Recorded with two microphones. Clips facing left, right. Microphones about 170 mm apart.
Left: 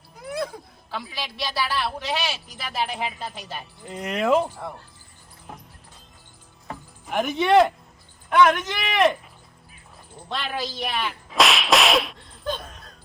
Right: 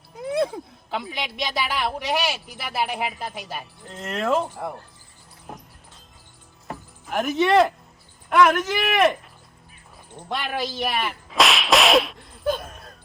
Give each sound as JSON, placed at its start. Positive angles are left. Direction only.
{"t": 0.2, "sound": "a sound", "side_deg": -25}
{"t": 1.1, "sound": "a woman's voice", "side_deg": -20}
{"t": 3.8, "sound": "speech", "side_deg": 5}
{"t": 5.5, "sound": "music", "side_deg": 0}
{"t": 6.7, "sound": "music", "side_deg": 0}
{"t": 8.3, "sound": "speech", "side_deg": 0}
{"t": 10.2, "sound": "whip", "side_deg": -10}